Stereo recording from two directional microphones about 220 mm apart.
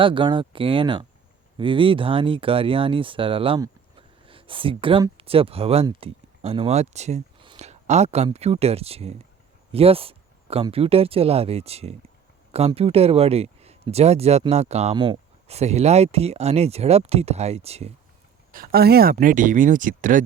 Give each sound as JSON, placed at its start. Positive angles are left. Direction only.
{"t": 0.0, "sound": "speech", "side_deg": -20}
{"t": 18.5, "sound": "speech", "side_deg": -40}